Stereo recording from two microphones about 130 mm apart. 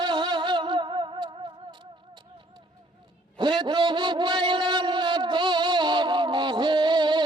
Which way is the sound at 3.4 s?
35° right (ahead or behind).